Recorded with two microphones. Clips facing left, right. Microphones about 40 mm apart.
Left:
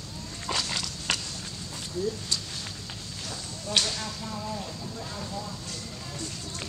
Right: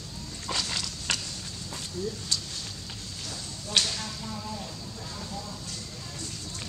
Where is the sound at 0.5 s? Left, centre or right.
Centre.